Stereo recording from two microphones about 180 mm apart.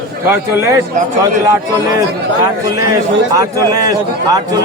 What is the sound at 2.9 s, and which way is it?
A man's voice, 20° right (ahead or behind).